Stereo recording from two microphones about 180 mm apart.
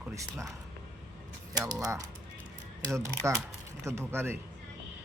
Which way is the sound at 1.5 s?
20° right (ahead or behind).